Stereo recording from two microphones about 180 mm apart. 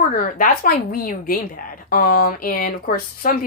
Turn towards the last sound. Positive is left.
turn(degrees=50)  # may be behind; listen again after turning